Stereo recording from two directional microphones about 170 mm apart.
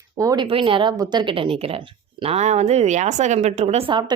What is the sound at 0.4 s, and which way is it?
A woman's voice, 30° right (ahead or behind).